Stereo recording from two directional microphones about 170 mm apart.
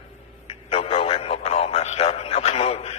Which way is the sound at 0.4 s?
35° left (ahead or behind).